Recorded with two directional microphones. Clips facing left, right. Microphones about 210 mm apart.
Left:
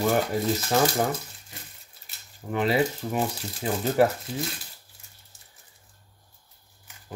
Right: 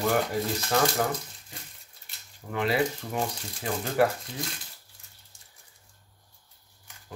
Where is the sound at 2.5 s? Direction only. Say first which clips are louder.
Left 3 dB; 25° left (ahead or behind).